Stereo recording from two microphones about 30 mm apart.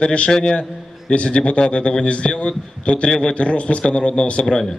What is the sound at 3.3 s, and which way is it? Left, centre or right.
Speech, left.